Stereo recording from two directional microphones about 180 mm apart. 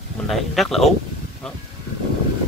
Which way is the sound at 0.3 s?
Centre (ahead or behind).